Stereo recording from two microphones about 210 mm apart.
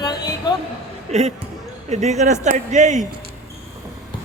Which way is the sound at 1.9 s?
35° right (ahead or behind).